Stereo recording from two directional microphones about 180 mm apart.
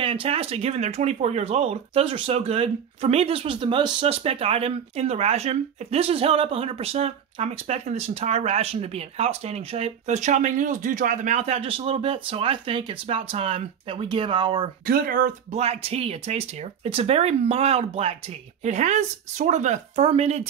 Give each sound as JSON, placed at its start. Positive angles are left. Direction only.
{"t": 0.0, "sound": "speech", "side_deg": -30}
{"t": 14.9, "sound": "speech", "side_deg": -50}